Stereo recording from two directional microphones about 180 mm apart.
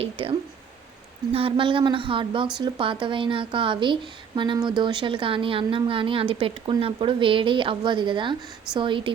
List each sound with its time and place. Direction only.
0.0 s a woman's voice: 30° right (ahead or behind)